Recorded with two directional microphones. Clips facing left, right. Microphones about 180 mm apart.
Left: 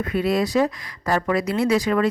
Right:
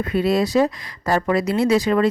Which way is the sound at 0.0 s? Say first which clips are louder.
Right 2 dB; 30° right (ahead or behind).